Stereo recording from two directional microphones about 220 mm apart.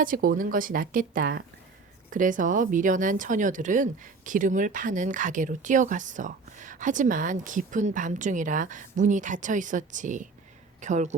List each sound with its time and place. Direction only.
0.0 s speech: 40° right (ahead or behind)